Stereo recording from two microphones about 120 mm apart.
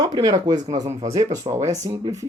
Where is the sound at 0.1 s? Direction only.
30° right (ahead or behind).